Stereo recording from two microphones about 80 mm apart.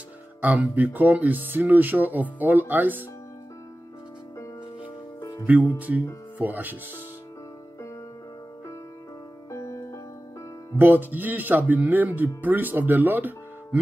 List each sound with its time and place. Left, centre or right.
0.4 s speech: right
5.8 s speech: centre
9.5 s music: left
10.8 s speech: right